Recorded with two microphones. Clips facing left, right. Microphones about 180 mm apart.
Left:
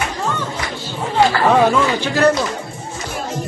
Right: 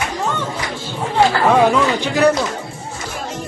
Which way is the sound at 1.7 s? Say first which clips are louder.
Even; 15° right (ahead or behind).